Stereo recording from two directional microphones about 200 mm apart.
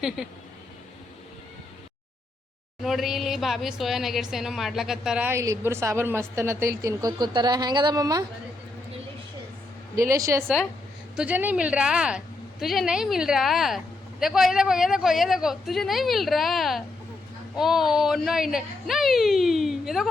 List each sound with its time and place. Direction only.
2.8 s a woman's voice: centre (ahead or behind); by 8.2 s 20° right (ahead or behind)
9.9 s a woman's voice: 15° right (ahead or behind)